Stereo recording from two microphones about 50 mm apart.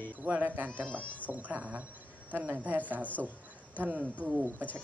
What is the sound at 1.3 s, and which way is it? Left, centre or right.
Speech, right.